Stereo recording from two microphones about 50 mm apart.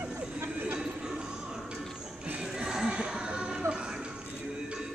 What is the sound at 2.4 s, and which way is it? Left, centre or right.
Music, centre.